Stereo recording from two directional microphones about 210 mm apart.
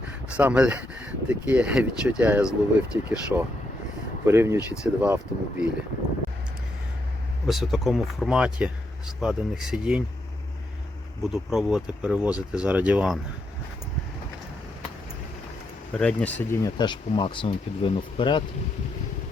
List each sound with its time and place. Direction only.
0.3 s speech: 5° right (ahead or behind)
7.4 s speech: centre (ahead or behind)
11.2 s speech: centre (ahead or behind)
16.0 s speech: 5° left (ahead or behind); by 18.4 s 25° left (ahead or behind)